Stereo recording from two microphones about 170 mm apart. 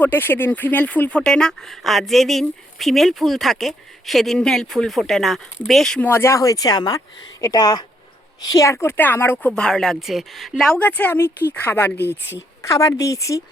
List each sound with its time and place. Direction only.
0.0 s a woman's voice: 10° left (ahead or behind)